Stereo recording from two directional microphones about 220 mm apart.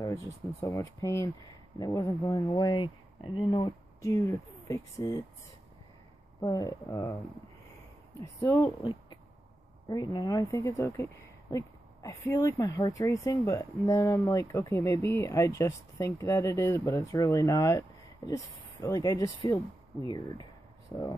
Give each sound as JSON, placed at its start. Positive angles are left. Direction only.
{"t": 0.0, "sound": "speech", "side_deg": 15}
{"t": 6.4, "sound": "speech", "side_deg": 15}
{"t": 8.2, "sound": "speech", "side_deg": 15}